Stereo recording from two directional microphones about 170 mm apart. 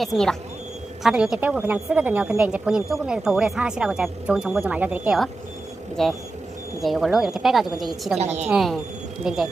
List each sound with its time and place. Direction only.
0.0 s a woman's voice: centre (ahead or behind)
8.2 s a woman's voice: 40° right (ahead or behind)
8.4 s a woman's voice: centre (ahead or behind)